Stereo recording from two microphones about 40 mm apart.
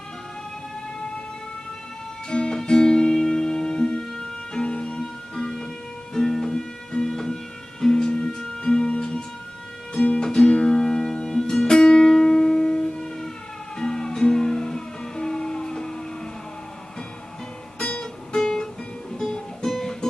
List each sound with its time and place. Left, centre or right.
2.3 s music: left
17.8 s music: left